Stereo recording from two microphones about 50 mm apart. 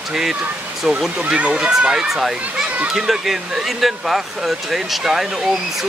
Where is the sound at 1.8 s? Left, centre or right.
Centre.